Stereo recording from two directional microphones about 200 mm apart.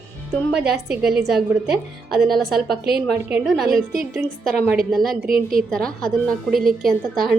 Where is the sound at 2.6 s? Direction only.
50° right (ahead or behind).